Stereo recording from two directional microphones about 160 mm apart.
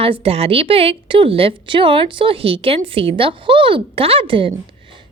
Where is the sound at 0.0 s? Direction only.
35° right (ahead or behind).